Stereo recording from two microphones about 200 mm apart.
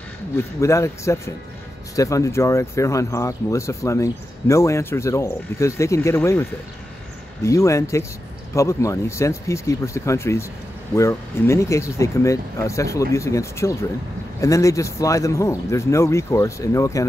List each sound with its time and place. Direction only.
0.4 s speech: 15° left (ahead or behind)
7.4 s speech: 15° left (ahead or behind)